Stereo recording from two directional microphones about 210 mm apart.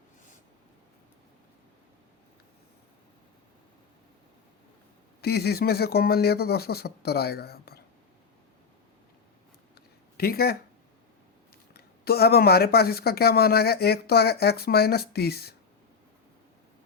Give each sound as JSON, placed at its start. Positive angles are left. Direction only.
{"t": 5.2, "sound": "speech", "side_deg": 50}
{"t": 10.2, "sound": "speech", "side_deg": 45}